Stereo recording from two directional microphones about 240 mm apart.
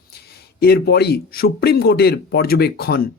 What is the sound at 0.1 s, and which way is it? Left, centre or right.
Speech, left.